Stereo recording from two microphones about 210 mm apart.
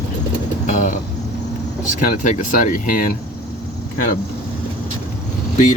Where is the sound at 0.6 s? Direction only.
35° left (ahead or behind).